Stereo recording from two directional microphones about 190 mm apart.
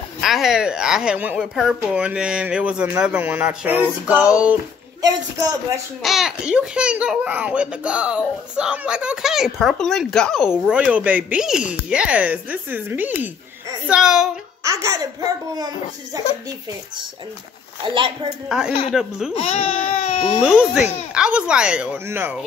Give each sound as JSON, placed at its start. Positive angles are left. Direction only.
{"t": 0.2, "sound": "a child's voice", "side_deg": 0}
{"t": 6.0, "sound": "a child's voice", "side_deg": 0}
{"t": 14.6, "sound": "a child's voice", "side_deg": -15}
{"t": 17.8, "sound": "a child's voice", "side_deg": -25}
{"t": 18.9, "sound": "a child's voice", "side_deg": -5}
{"t": 19.3, "sound": "speech", "side_deg": 35}
{"t": 20.4, "sound": "a child's voice", "side_deg": -5}